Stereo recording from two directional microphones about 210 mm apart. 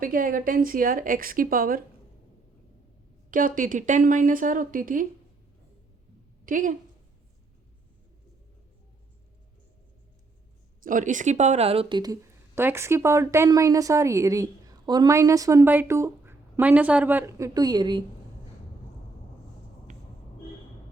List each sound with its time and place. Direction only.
0.0 s speech: 40° right (ahead or behind)
3.2 s speech: 40° right (ahead or behind)
6.4 s a woman's voice: 40° right (ahead or behind)
10.8 s speech: 40° right (ahead or behind); by 12.1 s 20° right (ahead or behind)
12.5 s a woman's voice: 10° right (ahead or behind)
19.9 s vehicle: 35° right (ahead or behind)